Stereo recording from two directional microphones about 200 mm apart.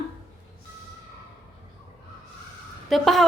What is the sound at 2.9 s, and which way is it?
Speech, centre (ahead or behind).